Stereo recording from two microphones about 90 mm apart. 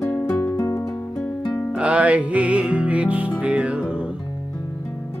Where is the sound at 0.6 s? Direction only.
35° left (ahead or behind).